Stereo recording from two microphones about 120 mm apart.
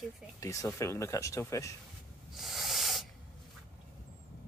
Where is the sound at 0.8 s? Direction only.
25° left (ahead or behind).